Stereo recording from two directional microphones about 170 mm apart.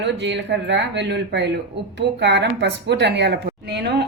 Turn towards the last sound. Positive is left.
turn(degrees=-75)  # may be behind; listen again after turning